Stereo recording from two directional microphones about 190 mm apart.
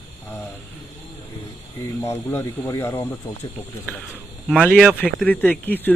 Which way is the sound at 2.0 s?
15° left (ahead or behind).